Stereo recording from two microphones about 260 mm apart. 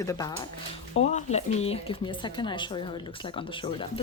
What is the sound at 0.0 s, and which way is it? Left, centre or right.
Speech, centre.